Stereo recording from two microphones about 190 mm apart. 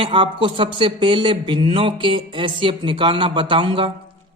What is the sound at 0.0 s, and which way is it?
Speech, 25° right (ahead or behind).